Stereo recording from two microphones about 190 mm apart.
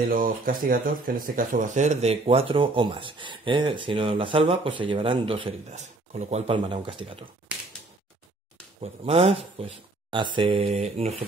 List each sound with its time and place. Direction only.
0.0 s speech: 50° right (ahead or behind); by 7.2 s 25° right (ahead or behind)
7.5 s a sound: 5° right (ahead or behind)
8.8 s speech: 35° right (ahead or behind)